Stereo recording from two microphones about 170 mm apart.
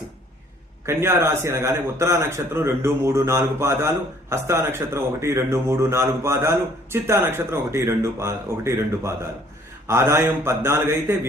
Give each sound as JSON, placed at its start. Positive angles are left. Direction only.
{"t": 0.9, "sound": "a man's voice", "side_deg": -15}